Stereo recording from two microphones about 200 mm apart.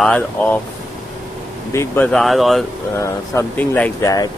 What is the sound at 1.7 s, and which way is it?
Speech, 10° left (ahead or behind).